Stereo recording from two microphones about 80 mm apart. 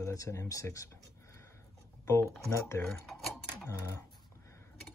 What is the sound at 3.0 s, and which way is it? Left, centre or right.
Dishes, centre.